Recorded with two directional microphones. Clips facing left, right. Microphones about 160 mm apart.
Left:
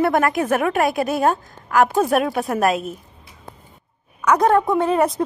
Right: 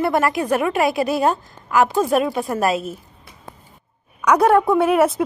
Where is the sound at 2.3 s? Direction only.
Centre (ahead or behind).